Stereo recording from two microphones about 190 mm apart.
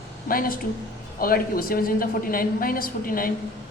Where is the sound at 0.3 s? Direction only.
50° left (ahead or behind).